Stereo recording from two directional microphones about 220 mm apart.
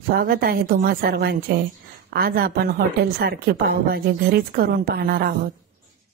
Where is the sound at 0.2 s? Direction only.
40° right (ahead or behind).